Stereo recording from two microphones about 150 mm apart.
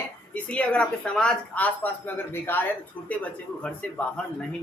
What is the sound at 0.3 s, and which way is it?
Speech, 10° left (ahead or behind).